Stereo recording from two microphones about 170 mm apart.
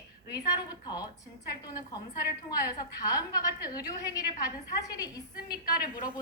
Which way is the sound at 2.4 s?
20° left (ahead or behind).